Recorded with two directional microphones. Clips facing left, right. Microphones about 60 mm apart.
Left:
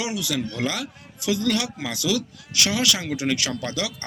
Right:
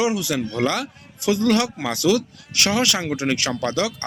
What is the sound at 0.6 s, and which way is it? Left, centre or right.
A man's voice, right.